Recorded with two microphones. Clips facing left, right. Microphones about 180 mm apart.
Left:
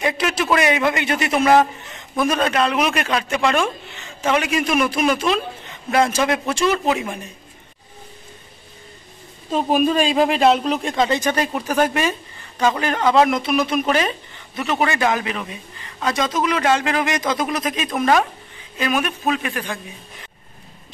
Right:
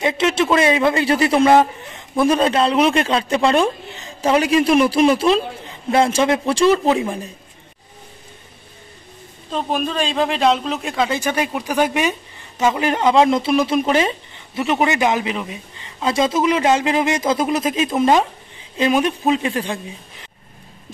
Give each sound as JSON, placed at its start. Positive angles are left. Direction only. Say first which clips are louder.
{"t": 0.0, "sound": "a man's voice", "louder": "right 4 dB", "side_deg": -25}
{"t": 9.5, "sound": "a man's voice", "louder": "left 4 dB", "side_deg": 5}